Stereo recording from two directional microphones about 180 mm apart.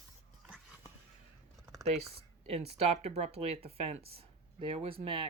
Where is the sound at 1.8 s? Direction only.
35° right (ahead or behind).